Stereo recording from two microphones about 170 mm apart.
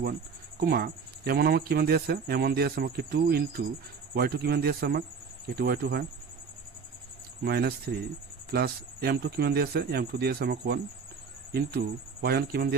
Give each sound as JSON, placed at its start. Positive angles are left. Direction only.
{"t": 0.6, "sound": "speech", "side_deg": -70}
{"t": 7.4, "sound": "speech", "side_deg": -70}